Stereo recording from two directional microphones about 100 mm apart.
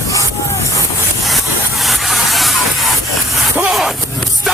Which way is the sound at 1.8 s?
Centre (ahead or behind).